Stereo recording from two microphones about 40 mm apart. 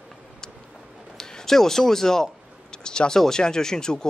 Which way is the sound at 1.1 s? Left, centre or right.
Centre.